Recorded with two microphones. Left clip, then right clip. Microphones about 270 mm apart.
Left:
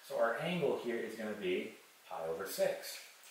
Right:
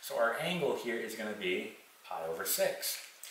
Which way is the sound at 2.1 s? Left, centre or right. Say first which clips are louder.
Right 3 dB; centre.